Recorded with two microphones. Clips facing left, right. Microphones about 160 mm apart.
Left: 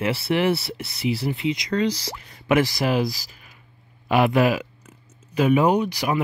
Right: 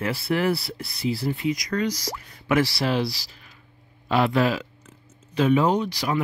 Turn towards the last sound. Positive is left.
turn(degrees=15)  # may be behind; listen again after turning